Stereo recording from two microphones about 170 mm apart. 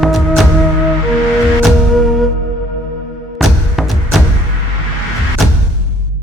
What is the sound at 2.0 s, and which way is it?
Music, centre (ahead or behind).